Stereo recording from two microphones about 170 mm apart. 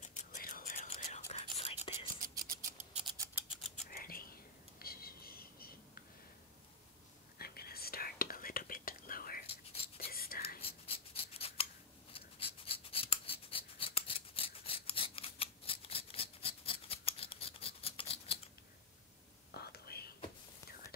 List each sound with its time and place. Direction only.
0.0 s whispering: 45° left (ahead or behind)
0.4 s whispering: 55° left (ahead or behind)
0.9 s whispering: 40° left (ahead or behind)
2.1 s scratch: 55° right (ahead or behind)
3.3 s mechanisms: 5° right (ahead or behind)
3.9 s whispering: 60° left (ahead or behind)
7.3 s whispering: 65° left (ahead or behind)
9.5 s whispering: 35° left (ahead or behind)
10.1 s whispering: 60° left (ahead or behind)
10.6 s scissors: 35° left (ahead or behind)
12.1 s writing: 35° left (ahead or behind)
19.5 s whispering: 65° left (ahead or behind)